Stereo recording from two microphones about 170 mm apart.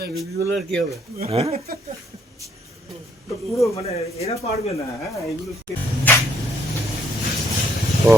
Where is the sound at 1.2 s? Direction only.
35° right (ahead or behind).